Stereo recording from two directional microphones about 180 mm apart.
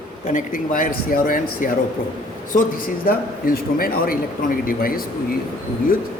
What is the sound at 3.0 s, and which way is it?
Speech, 55° left (ahead or behind).